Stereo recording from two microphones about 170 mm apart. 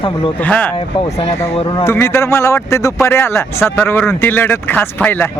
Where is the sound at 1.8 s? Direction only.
15° left (ahead or behind).